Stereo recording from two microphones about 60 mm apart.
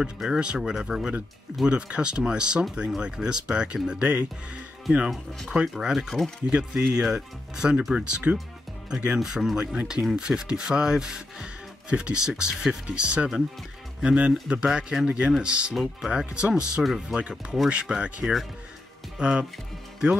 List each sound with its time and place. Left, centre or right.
0.2 s speech: centre
5.7 s speech: centre
6.0 s speech: centre
6.4 s speech: centre
9.2 s speech: centre
18.2 s speech: centre
19.1 s speech: centre